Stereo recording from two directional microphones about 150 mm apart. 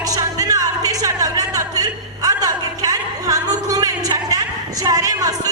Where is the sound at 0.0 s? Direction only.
25° right (ahead or behind).